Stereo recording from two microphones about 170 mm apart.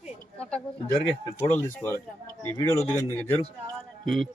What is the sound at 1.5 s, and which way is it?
A woman's voice, 10° left (ahead or behind).